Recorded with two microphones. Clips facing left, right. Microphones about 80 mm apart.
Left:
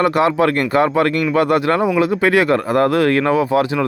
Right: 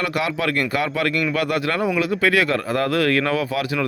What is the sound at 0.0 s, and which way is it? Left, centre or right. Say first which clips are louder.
Speech: left 8 dB; left.